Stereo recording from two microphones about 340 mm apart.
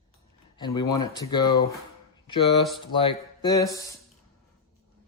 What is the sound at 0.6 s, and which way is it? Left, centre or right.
Speech, centre.